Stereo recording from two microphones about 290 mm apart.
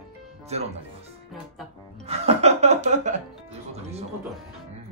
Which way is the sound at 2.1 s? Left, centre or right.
Right.